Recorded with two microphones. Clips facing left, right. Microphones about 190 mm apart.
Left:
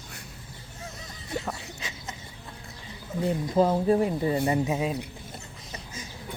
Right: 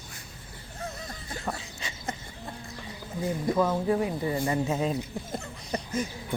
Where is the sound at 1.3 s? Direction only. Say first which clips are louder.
Left 8 dB; 65° left (ahead or behind).